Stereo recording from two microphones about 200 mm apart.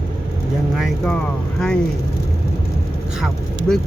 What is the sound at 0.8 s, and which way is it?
Speech, centre (ahead or behind).